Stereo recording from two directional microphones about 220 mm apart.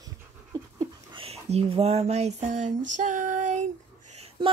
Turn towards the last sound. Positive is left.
turn(degrees=-30)  # may be behind; listen again after turning